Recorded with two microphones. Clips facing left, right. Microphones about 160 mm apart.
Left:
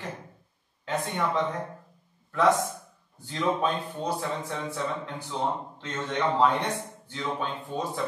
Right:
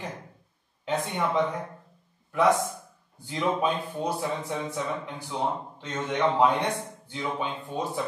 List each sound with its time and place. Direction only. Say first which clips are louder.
0.8 s speech: right 1 dB; 15° right (ahead or behind)